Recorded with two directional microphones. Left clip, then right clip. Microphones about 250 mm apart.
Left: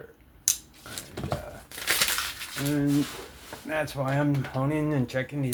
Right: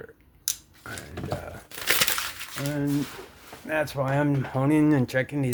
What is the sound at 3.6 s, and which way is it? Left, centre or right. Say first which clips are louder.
Speech: right 3 dB; right.